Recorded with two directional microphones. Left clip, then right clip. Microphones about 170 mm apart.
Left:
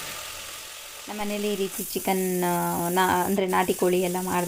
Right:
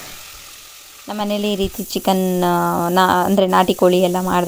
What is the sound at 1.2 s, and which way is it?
Speech, 55° right (ahead or behind).